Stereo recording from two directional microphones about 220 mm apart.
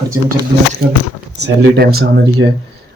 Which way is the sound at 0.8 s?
45° right (ahead or behind).